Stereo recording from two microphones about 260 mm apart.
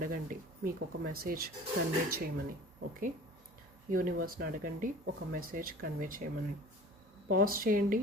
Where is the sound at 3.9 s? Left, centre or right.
Right.